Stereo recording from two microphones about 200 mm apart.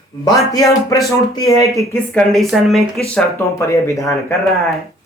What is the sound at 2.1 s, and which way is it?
Speech, centre (ahead or behind).